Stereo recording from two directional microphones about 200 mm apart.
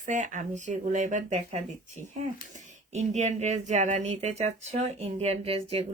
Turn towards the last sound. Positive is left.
turn(degrees=-30)  # may be behind; listen again after turning